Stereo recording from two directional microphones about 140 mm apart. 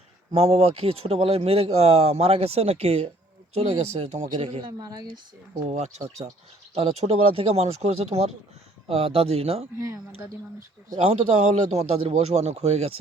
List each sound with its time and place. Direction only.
0.3 s speech: 45° right (ahead or behind)
4.4 s speech: 35° right (ahead or behind)
5.6 s speech: 55° right (ahead or behind)
6.2 s speech: 35° right (ahead or behind)
6.7 s speech: 45° right (ahead or behind)
10.6 s speech: 70° right (ahead or behind)
11.0 s speech: 50° right (ahead or behind)